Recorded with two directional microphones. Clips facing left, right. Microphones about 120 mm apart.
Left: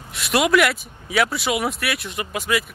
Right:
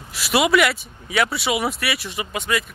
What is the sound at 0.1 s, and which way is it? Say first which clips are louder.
Speech: even; centre (ahead or behind).